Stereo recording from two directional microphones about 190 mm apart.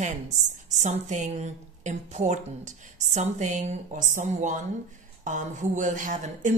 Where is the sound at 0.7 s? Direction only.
40° right (ahead or behind).